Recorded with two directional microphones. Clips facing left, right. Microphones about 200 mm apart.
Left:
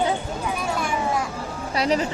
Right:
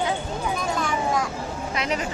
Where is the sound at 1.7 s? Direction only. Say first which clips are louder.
Left 6 dB; 35° left (ahead or behind).